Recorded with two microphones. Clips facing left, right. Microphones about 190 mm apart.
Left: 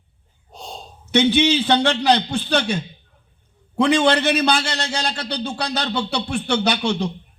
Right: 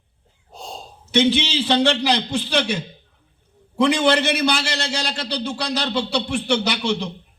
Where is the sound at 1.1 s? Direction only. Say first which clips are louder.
Left 2 dB; 60° left (ahead or behind).